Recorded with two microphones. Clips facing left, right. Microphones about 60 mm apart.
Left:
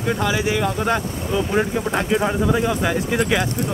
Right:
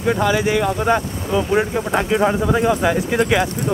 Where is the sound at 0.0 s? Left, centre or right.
Centre.